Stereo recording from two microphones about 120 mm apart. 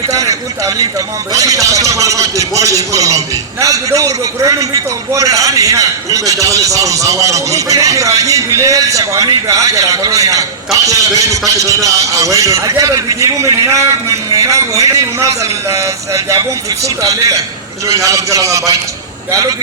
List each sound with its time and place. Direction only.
0.1 s a man's voice: 30° right (ahead or behind)